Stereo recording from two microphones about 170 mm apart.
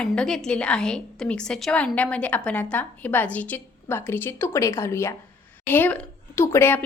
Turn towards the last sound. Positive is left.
turn(degrees=15)  # may be behind; listen again after turning